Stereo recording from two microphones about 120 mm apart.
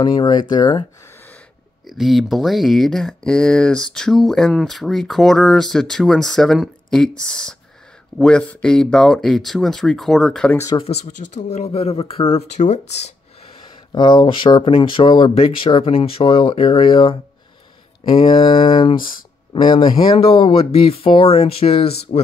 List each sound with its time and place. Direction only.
0.0 s speech: 35° left (ahead or behind)
1.9 s speech: centre (ahead or behind)
11.1 s speech: 90° left; by 12.4 s 55° left (ahead or behind)
12.5 s speech: 70° left (ahead or behind)
13.9 s speech: 40° left (ahead or behind); by 22.2 s 55° left (ahead or behind)